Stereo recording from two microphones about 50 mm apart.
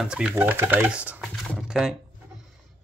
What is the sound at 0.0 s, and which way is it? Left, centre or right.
Speech, centre.